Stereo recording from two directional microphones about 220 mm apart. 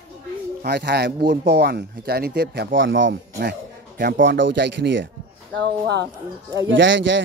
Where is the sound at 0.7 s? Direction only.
50° right (ahead or behind).